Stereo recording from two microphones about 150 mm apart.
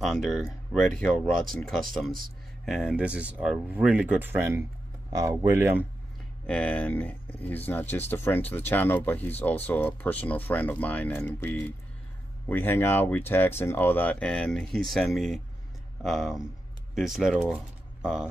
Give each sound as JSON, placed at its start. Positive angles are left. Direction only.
{"t": 0.0, "sound": "speech", "side_deg": 0}
{"t": 6.4, "sound": "speech", "side_deg": 5}